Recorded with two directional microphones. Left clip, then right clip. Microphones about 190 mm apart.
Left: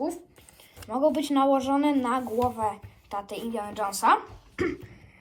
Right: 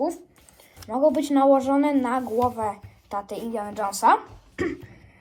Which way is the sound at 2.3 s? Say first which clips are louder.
Right 3 dB; 5° left (ahead or behind).